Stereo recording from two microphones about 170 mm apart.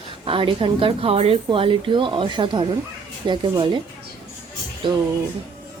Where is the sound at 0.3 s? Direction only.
30° right (ahead or behind).